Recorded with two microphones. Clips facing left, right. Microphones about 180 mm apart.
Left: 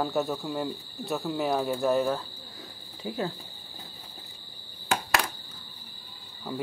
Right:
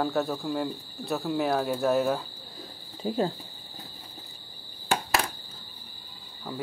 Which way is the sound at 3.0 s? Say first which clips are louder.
Right 4 dB; 30° right (ahead or behind).